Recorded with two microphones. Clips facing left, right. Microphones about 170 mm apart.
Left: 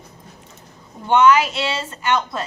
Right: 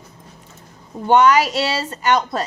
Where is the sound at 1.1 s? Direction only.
40° right (ahead or behind).